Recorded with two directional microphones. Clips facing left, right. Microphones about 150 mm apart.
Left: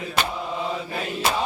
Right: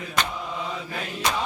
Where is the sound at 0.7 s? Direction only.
30° left (ahead or behind).